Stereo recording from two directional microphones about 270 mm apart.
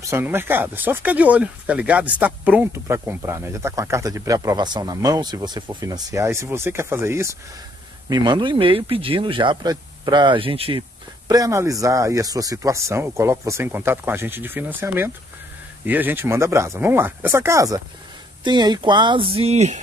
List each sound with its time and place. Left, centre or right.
0.0 s speech: centre; by 19.8 s right